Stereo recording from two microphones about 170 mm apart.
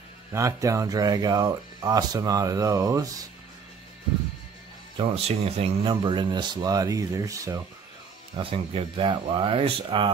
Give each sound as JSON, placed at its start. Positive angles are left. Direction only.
{"t": 0.3, "sound": "speech", "side_deg": -15}
{"t": 4.9, "sound": "speech", "side_deg": -35}
{"t": 8.4, "sound": "speech", "side_deg": -30}